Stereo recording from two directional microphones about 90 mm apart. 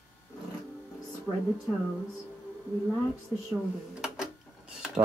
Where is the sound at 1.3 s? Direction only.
25° left (ahead or behind).